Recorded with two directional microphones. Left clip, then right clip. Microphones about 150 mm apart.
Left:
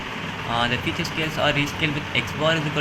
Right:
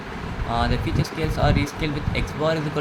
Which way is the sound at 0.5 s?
30° right (ahead or behind).